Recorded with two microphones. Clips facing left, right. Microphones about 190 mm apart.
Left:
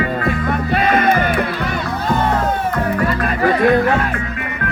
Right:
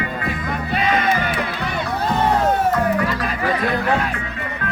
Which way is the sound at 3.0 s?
50° left (ahead or behind).